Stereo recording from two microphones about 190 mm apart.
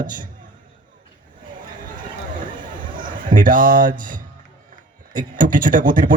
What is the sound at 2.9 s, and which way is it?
A man's voice, 45° right (ahead or behind).